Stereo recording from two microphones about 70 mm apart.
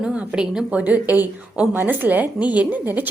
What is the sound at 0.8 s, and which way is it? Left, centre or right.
A woman's voice, right.